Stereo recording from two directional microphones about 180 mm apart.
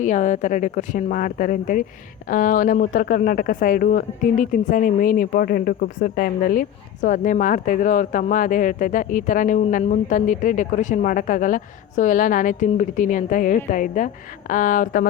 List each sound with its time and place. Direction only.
0.0 s speech: 45° left (ahead or behind)